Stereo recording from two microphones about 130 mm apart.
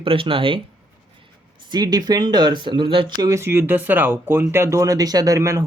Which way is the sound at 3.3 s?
20° right (ahead or behind).